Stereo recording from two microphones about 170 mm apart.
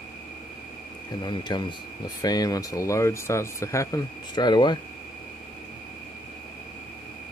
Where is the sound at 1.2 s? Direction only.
25° left (ahead or behind).